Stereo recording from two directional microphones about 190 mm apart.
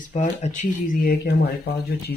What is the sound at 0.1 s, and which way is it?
Speech, 40° left (ahead or behind).